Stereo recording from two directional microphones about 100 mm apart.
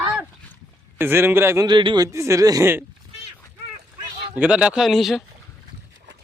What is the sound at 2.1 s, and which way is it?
Speech, 30° right (ahead or behind).